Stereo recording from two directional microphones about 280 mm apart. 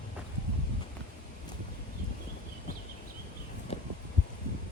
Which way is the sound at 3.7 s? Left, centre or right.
Left.